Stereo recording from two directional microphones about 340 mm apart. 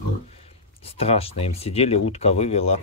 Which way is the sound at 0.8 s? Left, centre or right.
Centre.